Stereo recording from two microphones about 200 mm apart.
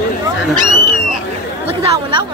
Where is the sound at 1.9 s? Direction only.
20° right (ahead or behind).